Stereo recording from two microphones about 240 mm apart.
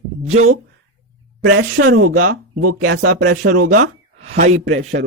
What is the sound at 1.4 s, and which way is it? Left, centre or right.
Speech, right.